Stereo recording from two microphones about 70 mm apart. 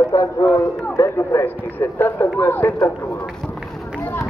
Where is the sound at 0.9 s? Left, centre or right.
Left.